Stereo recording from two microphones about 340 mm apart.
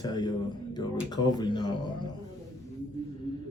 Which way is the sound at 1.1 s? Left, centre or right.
Centre.